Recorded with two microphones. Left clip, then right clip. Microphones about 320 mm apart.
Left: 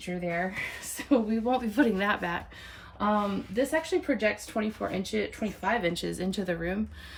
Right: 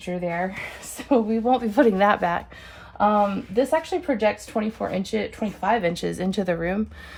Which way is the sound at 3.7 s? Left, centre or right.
Centre.